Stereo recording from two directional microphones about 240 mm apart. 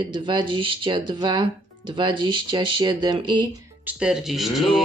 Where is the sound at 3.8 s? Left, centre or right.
Centre.